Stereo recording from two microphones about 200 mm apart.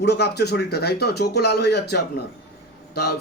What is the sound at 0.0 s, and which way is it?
Speech, 55° left (ahead or behind).